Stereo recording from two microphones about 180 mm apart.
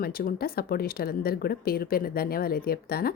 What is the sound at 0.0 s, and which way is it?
A woman's voice, 55° left (ahead or behind).